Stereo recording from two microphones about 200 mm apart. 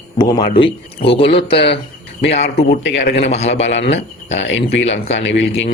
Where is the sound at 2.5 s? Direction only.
55° left (ahead or behind).